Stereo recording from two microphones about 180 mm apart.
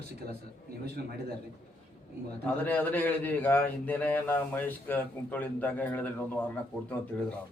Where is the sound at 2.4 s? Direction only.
10° left (ahead or behind).